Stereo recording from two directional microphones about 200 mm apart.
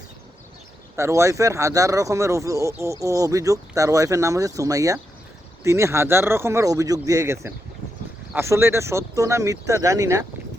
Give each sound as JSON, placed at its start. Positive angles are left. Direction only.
{"t": 0.9, "sound": "speech", "side_deg": -15}